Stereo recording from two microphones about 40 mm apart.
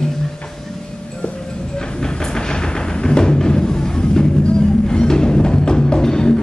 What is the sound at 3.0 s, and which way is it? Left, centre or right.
Music, centre.